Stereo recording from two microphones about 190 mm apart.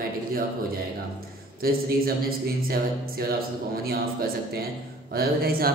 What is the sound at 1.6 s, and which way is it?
Speech, 50° right (ahead or behind).